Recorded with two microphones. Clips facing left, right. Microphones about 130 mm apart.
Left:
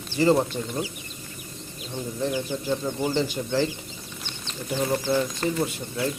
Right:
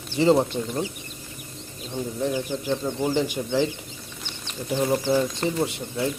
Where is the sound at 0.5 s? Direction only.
15° right (ahead or behind).